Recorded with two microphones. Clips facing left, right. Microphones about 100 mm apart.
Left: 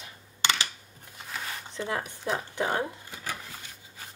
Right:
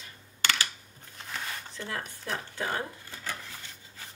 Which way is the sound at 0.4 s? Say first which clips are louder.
Left 2 dB; 20° left (ahead or behind).